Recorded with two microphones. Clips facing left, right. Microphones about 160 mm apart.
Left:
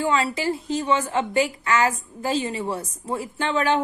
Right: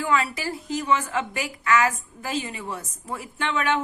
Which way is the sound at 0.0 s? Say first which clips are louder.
Left 2 dB; 30° left (ahead or behind).